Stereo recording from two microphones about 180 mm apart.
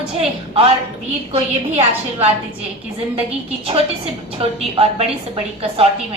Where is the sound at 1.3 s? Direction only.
35° right (ahead or behind).